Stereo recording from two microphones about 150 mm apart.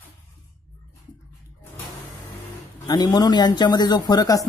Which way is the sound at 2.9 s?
25° left (ahead or behind).